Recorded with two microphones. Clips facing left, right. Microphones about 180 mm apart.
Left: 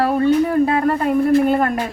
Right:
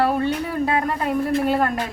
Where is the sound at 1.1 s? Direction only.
Centre (ahead or behind).